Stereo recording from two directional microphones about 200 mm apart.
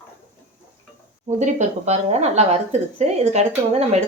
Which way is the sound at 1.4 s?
35° right (ahead or behind).